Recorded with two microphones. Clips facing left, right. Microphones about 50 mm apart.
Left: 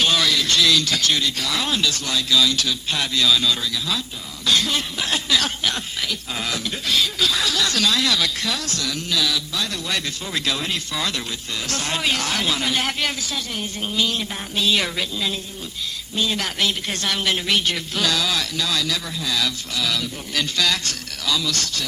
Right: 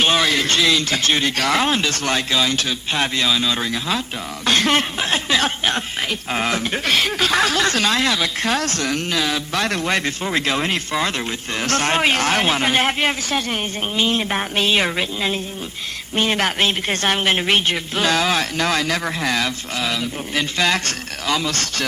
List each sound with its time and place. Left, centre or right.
0.0 s a man's voice: right
1.4 s speech: right
3.6 s speech: right
4.9 s speech: right
8.4 s speech: right
9.5 s speech: right
16.1 s speech: right